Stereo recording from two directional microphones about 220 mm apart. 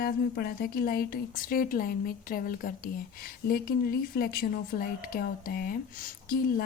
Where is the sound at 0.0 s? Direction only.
45° left (ahead or behind).